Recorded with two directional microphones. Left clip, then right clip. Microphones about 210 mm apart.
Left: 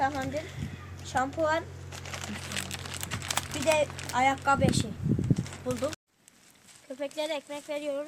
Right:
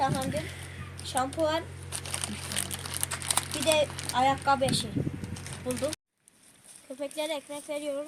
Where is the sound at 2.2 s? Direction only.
15° left (ahead or behind).